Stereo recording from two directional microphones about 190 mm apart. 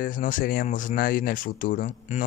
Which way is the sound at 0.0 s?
45° left (ahead or behind).